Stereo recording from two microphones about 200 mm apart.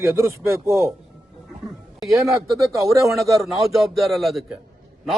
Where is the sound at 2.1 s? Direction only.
15° right (ahead or behind).